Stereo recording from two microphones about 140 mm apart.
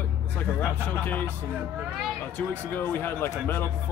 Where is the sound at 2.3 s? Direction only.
10° left (ahead or behind).